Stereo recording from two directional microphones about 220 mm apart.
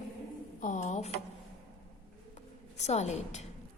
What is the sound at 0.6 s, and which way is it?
Speech, 35° left (ahead or behind).